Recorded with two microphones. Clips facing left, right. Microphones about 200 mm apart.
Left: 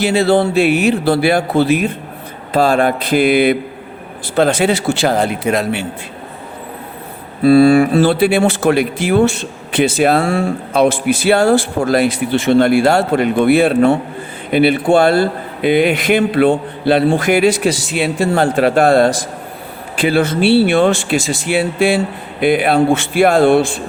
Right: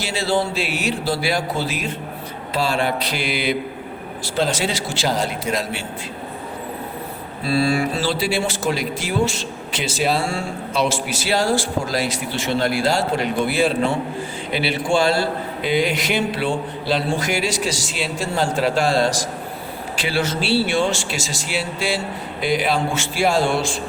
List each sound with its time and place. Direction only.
0.0 s a man's voice: 60° left (ahead or behind)
2.5 s mantra: 50° left (ahead or behind)
4.4 s a man's voice: 60° left (ahead or behind)
7.4 s a man's voice: 55° left (ahead or behind)